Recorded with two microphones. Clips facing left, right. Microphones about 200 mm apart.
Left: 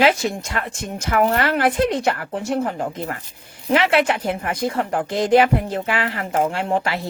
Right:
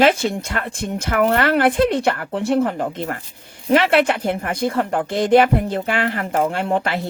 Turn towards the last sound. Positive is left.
turn(degrees=-55)  # may be behind; listen again after turning